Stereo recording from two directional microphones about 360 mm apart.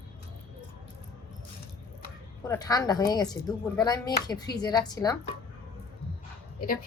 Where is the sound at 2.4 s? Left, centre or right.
Centre.